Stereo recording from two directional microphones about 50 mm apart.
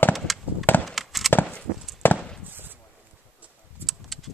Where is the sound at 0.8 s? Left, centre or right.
Centre.